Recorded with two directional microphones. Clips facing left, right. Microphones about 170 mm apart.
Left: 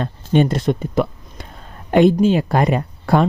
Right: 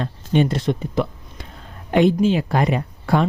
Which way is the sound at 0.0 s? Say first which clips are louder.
Left 3 dB; 45° left (ahead or behind).